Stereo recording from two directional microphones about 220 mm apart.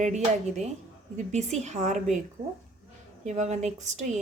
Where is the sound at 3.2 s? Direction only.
30° right (ahead or behind).